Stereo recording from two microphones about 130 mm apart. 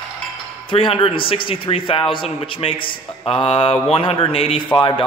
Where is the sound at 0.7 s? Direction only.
40° left (ahead or behind).